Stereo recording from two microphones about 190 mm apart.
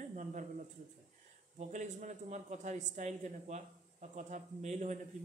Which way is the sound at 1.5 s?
40° right (ahead or behind).